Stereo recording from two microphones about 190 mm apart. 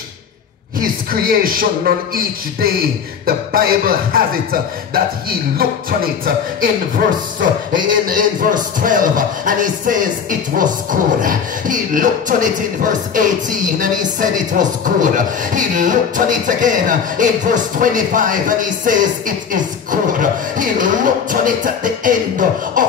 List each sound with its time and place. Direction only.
0.7 s speech: 50° right (ahead or behind)